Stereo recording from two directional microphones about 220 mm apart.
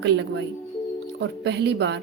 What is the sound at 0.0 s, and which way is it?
A woman's voice, 50° right (ahead or behind).